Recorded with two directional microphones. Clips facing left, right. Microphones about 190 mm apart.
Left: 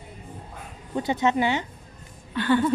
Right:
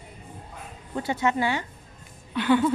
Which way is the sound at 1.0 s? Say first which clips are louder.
Left 2 dB; 20° left (ahead or behind).